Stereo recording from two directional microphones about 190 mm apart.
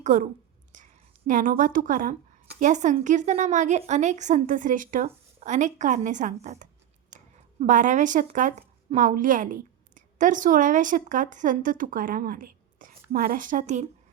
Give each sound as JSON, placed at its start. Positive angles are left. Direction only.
{"t": 0.0, "sound": "a woman's voice", "side_deg": -40}
{"t": 1.3, "sound": "a woman's voice", "side_deg": -45}